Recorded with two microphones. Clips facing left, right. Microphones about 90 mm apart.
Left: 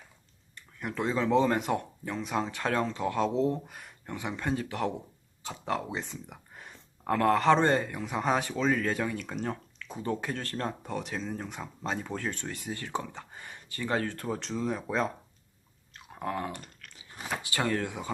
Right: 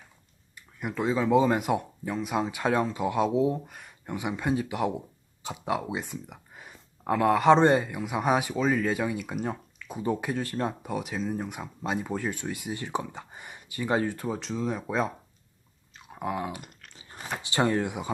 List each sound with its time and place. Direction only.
0.5 s speech: 5° right (ahead or behind)
4.0 s speech: 15° right (ahead or behind)
6.3 s a sound: 5° right (ahead or behind)
7.5 s speech: 15° right (ahead or behind)
16.8 s a sound: 35° right (ahead or behind)
17.4 s speech: 25° right (ahead or behind)